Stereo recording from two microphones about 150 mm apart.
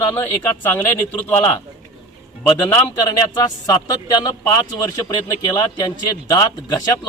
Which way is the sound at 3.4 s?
25° left (ahead or behind).